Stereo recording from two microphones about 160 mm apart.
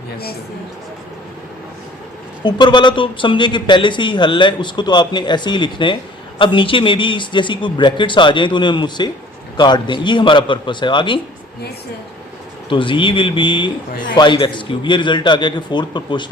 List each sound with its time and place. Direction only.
2.4 s a man's voice: 30° left (ahead or behind)
12.6 s a man's voice: 30° left (ahead or behind)